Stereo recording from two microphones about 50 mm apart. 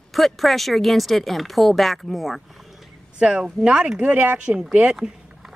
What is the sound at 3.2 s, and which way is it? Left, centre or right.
Speech, centre.